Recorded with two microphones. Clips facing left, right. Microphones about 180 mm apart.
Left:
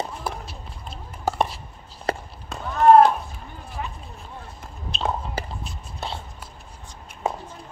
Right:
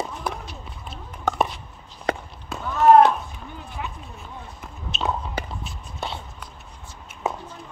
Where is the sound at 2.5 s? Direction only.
Centre (ahead or behind).